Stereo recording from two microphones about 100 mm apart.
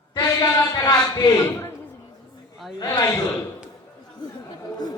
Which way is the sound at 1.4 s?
25° left (ahead or behind).